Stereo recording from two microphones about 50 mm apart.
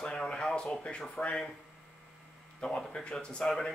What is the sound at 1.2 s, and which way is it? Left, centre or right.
Speech, left.